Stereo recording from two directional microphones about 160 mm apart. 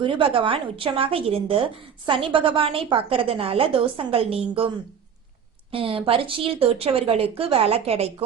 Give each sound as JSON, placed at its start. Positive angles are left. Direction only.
{"t": 0.0, "sound": "a woman's voice", "side_deg": -35}
{"t": 5.7, "sound": "a woman's voice", "side_deg": -35}